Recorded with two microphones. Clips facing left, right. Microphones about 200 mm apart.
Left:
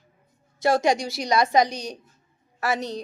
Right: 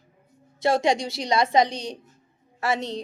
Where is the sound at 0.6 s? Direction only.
25° right (ahead or behind).